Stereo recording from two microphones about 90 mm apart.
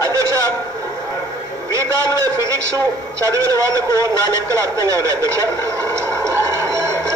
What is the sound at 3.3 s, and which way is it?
A man's voice, 35° right (ahead or behind).